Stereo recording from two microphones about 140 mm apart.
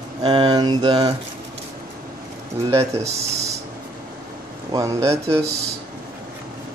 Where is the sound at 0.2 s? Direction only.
35° right (ahead or behind).